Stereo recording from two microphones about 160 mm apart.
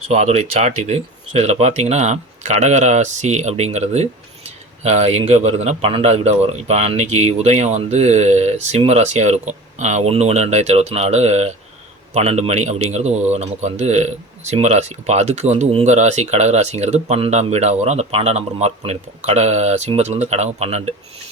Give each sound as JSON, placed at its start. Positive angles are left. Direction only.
{"t": 0.1, "sound": "speech", "side_deg": -40}